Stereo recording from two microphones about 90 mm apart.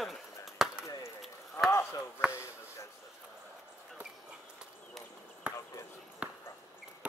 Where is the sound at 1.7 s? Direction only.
35° left (ahead or behind).